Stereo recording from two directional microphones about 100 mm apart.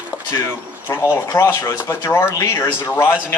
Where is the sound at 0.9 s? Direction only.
25° left (ahead or behind).